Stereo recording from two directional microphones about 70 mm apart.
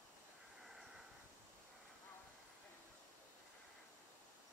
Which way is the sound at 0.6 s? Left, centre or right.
Centre.